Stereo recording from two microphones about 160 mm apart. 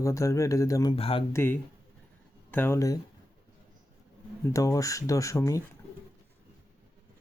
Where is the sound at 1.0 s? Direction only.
35° left (ahead or behind).